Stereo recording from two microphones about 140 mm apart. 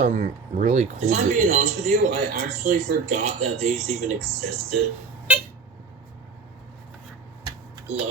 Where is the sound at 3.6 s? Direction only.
55° right (ahead or behind).